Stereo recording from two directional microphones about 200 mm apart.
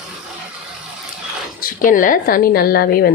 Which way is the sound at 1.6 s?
40° left (ahead or behind).